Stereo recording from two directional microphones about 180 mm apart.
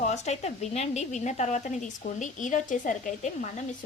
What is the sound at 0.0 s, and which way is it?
A woman's voice, 40° left (ahead or behind).